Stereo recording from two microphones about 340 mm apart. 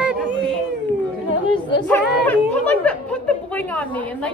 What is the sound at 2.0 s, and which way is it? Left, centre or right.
Speech, centre.